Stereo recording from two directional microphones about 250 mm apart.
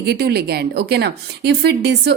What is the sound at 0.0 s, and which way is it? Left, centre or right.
A woman's voice, right.